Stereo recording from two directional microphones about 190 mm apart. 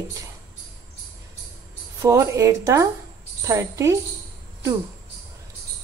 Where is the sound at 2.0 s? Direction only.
15° right (ahead or behind).